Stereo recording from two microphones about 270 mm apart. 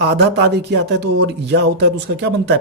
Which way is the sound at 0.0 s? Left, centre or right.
Right.